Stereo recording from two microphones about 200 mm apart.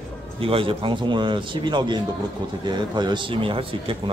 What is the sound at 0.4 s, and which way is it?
Speech, 25° right (ahead or behind).